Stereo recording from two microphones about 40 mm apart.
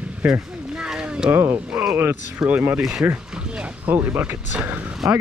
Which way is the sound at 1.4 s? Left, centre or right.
Right.